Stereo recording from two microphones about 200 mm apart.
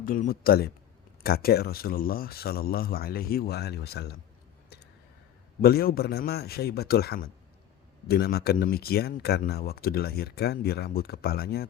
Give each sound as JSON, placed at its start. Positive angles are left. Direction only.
{"t": 0.0, "sound": "speech", "side_deg": 45}
{"t": 5.6, "sound": "speech", "side_deg": 50}